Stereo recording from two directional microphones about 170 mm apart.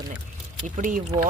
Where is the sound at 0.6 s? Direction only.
50° right (ahead or behind).